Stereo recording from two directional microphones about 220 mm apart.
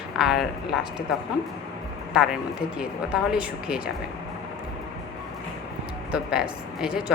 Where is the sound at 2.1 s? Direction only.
5° right (ahead or behind).